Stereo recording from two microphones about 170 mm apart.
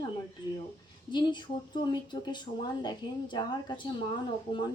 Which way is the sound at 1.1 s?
25° left (ahead or behind).